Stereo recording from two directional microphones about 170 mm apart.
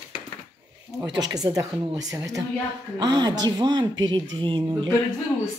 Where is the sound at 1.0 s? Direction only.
25° right (ahead or behind).